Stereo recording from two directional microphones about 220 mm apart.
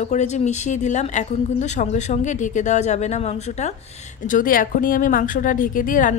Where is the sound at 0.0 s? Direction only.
30° left (ahead or behind).